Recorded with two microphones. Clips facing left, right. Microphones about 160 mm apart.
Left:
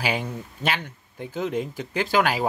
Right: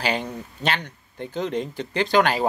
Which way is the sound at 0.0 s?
10° left (ahead or behind).